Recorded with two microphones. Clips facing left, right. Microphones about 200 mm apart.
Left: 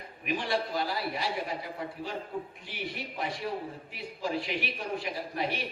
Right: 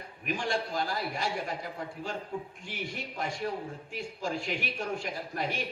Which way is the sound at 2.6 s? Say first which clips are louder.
Even; 45° right (ahead or behind).